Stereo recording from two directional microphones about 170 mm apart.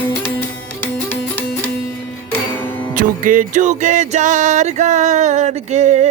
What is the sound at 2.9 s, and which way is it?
Music, 55° right (ahead or behind).